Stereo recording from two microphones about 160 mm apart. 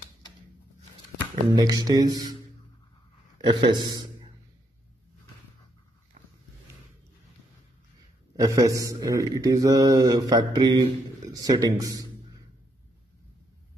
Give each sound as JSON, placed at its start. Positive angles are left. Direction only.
{"t": 1.5, "sound": "speech", "side_deg": -25}
{"t": 3.3, "sound": "a man's voice", "side_deg": -30}
{"t": 8.4, "sound": "speech", "side_deg": -20}